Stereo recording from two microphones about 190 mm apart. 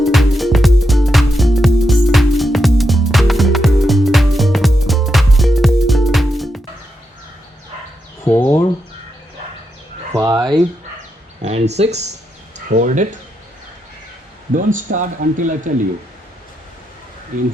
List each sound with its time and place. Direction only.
0.0 s music: centre (ahead or behind)
8.2 s a sound: 15° left (ahead or behind)
10.1 s a sound: 20° right (ahead or behind)
11.4 s speech: 35° right (ahead or behind)
14.5 s speech: 45° right (ahead or behind)
17.3 s speech: 45° right (ahead or behind)